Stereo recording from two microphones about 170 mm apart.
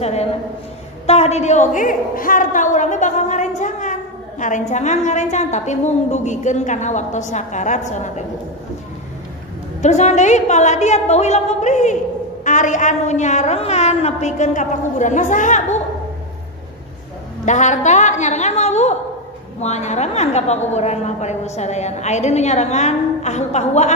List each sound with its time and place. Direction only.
0.0 s a woman's voice: 40° left (ahead or behind)
9.8 s a woman's voice: 40° left (ahead or behind)
17.5 s a woman's voice: 45° left (ahead or behind)